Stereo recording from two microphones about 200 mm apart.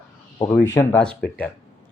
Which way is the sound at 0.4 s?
10° left (ahead or behind).